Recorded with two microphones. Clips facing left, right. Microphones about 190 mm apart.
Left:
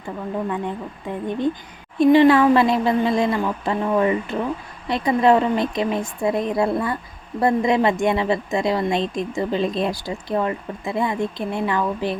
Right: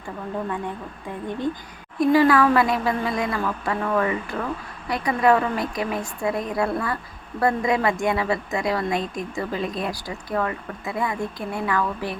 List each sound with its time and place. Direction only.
1.1 s a woman's voice: 20° left (ahead or behind)